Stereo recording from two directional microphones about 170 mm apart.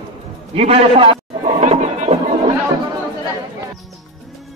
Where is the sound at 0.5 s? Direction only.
35° right (ahead or behind).